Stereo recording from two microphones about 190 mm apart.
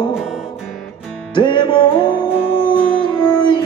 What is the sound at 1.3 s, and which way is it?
Music, 25° left (ahead or behind).